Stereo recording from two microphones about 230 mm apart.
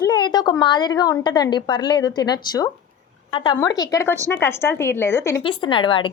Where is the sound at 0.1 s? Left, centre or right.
Centre.